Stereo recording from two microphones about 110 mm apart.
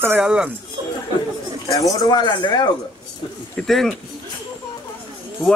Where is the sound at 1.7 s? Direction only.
35° left (ahead or behind).